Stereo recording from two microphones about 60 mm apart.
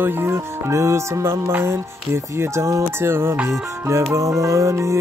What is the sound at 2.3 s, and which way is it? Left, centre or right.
Music, right.